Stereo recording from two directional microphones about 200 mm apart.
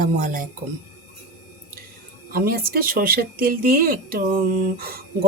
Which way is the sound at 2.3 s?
45° right (ahead or behind).